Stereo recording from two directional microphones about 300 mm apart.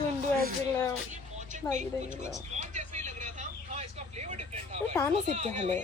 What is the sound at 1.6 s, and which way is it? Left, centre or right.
Speech, centre.